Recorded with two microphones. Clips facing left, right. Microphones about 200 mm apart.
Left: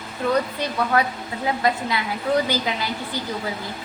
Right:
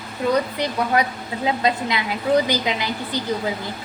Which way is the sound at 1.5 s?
20° right (ahead or behind).